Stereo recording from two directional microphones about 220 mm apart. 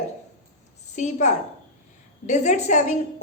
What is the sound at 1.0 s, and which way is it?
A woman's voice, 30° left (ahead or behind).